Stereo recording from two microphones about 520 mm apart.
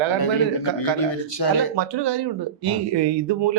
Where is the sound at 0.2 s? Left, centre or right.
Left.